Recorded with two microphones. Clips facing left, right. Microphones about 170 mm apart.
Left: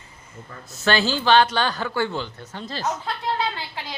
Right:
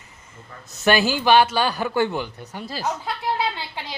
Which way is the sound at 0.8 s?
15° right (ahead or behind).